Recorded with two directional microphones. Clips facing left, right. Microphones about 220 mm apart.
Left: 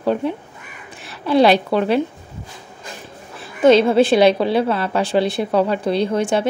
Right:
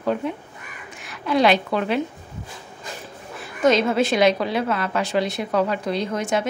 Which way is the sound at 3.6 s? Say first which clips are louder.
Left 6 dB; 30° left (ahead or behind).